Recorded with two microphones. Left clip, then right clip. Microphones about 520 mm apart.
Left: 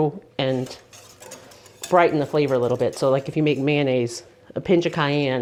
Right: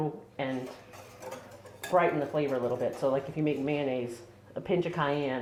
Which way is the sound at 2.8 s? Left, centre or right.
Left.